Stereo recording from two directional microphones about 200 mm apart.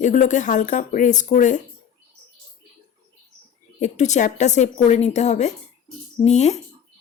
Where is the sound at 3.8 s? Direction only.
35° left (ahead or behind).